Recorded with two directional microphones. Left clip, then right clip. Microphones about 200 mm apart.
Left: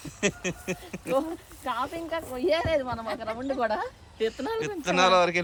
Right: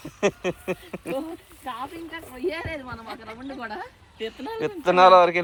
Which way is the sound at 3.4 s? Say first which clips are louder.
Left 7 dB; 50° left (ahead or behind).